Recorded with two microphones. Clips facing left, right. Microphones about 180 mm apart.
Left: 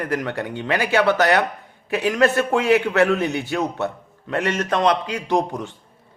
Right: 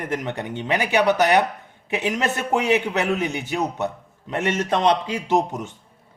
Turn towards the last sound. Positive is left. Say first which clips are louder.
# even
turn(degrees=-20)  # may be behind; listen again after turning